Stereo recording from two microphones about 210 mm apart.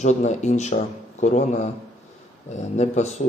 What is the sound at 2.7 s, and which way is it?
Speech, 35° left (ahead or behind).